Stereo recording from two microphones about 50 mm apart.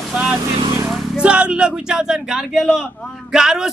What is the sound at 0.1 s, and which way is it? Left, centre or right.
Vehicle, right.